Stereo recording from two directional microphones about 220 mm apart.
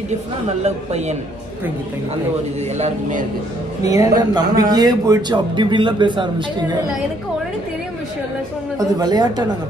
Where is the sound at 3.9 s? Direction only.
15° right (ahead or behind).